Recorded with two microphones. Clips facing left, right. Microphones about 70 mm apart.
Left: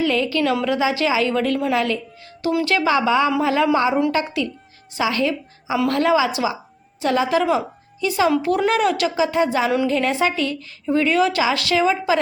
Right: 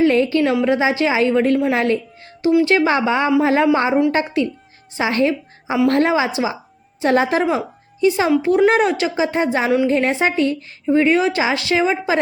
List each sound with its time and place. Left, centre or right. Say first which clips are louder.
0.0 s a sound: right 5 dB; right
0.6 s speech: right 3 dB; right
1.7 s speech: right 3 dB; right
8.4 s speech: right 4 dB; centre